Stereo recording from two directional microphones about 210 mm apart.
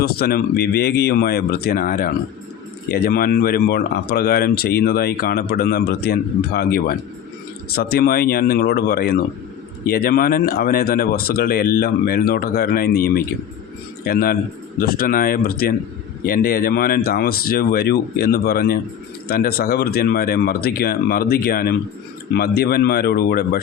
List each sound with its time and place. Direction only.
0.0 s speech: 50° left (ahead or behind)